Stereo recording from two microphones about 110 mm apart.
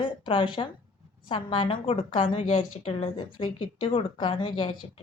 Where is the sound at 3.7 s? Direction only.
50° left (ahead or behind).